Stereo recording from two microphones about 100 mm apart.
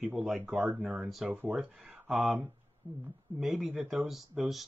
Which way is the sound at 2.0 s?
5° right (ahead or behind).